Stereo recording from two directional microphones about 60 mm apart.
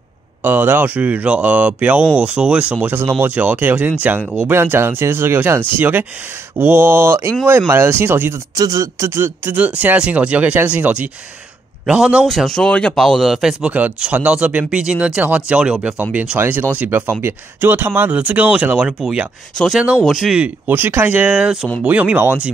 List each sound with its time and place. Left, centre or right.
0.4 s speech: right
8.5 s speech: right
9.2 s speech: right
9.6 s speech: right
12.3 s speech: centre
12.9 s speech: centre
13.4 s speech: centre
13.7 s speech: right
15.8 s speech: right; by 20.3 s centre
20.3 s speech: right
21.8 s speech: right